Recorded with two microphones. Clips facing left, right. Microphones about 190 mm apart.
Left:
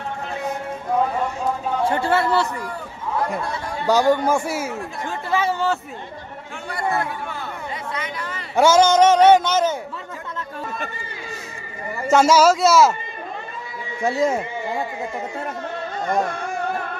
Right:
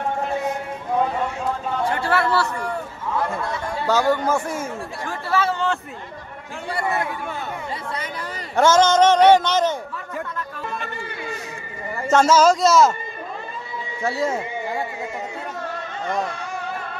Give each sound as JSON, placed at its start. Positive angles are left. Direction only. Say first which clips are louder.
{"t": 1.9, "sound": "speech", "louder": "left 1 dB", "side_deg": 25}
{"t": 3.8, "sound": "speech", "louder": "left 3 dB", "side_deg": 15}
{"t": 7.9, "sound": "speech", "louder": "even", "side_deg": -35}
{"t": 8.5, "sound": "speech", "louder": "left 1 dB", "side_deg": 10}
{"t": 12.1, "sound": "speech", "louder": "left 1 dB", "side_deg": 10}
{"t": 14.0, "sound": "speech", "louder": "left 3 dB", "side_deg": 20}
{"t": 16.0, "sound": "a sound", "louder": "left 4 dB", "side_deg": 50}